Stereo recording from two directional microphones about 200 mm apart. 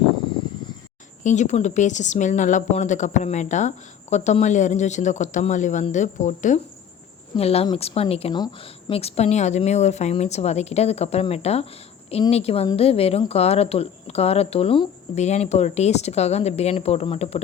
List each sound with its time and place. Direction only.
1.2 s a woman's voice: 35° left (ahead or behind)